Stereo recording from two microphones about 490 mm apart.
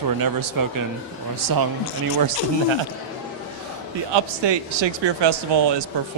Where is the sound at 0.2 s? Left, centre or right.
Right.